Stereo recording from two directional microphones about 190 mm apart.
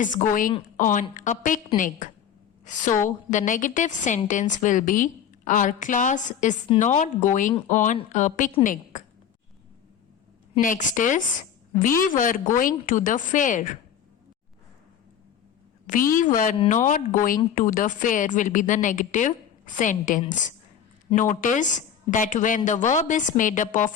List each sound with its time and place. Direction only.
0.0 s a woman's voice: 45° left (ahead or behind)
10.6 s a woman's voice: 45° left (ahead or behind)
15.9 s a woman's voice: 45° left (ahead or behind)